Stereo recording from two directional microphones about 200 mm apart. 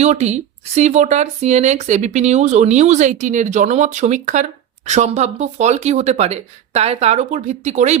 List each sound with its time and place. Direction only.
0.0 s speech: 35° right (ahead or behind)